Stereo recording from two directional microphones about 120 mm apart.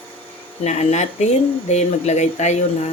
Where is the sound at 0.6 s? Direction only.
65° left (ahead or behind).